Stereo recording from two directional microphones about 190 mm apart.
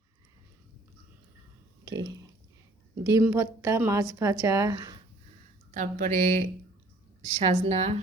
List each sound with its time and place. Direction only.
3.0 s a woman's voice: 15° right (ahead or behind)
5.7 s a woman's voice: 45° right (ahead or behind)